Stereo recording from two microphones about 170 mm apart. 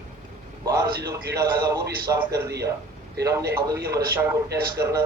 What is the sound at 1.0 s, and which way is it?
A man's voice, 15° right (ahead or behind).